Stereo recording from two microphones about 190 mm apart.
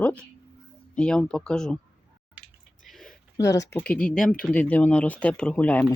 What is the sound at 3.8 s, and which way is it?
Speech, 5° left (ahead or behind).